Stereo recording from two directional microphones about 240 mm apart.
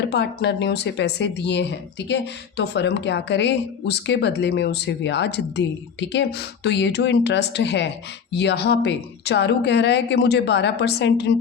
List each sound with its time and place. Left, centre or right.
0.1 s speech: left